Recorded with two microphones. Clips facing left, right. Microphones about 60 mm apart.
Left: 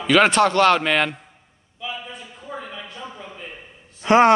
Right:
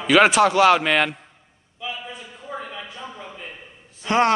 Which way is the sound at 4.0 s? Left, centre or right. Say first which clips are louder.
Left 5 dB; centre.